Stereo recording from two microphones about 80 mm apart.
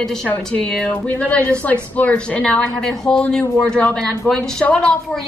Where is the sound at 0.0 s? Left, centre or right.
Centre.